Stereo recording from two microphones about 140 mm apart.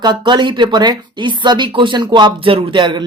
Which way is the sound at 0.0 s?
30° right (ahead or behind).